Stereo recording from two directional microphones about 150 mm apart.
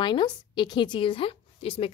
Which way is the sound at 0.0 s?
30° left (ahead or behind).